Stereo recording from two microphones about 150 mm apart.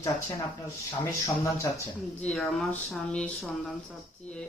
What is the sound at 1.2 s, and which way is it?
Speech, 20° left (ahead or behind).